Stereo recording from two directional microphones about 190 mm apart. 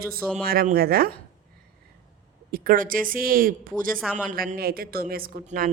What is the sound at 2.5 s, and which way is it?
A woman's voice, 50° right (ahead or behind).